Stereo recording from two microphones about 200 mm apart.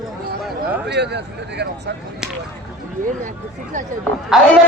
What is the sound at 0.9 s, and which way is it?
Speech, 55° right (ahead or behind).